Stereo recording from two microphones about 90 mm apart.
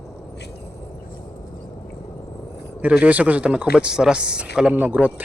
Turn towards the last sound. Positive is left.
turn(degrees=-15)  # may be behind; listen again after turning